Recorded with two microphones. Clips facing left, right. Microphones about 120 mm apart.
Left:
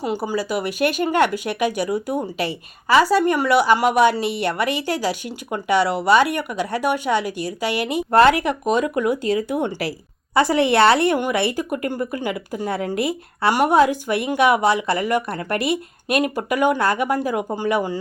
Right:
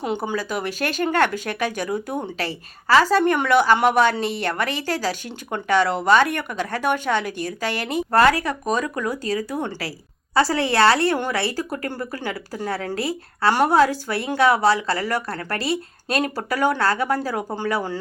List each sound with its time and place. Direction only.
0.0 s speech: 5° left (ahead or behind)
8.1 s speech: 20° left (ahead or behind)